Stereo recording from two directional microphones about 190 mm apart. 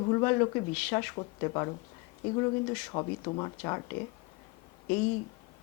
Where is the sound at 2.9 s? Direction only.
25° left (ahead or behind).